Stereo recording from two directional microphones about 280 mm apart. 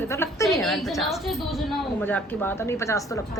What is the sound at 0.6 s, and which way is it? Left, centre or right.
A woman's voice, centre.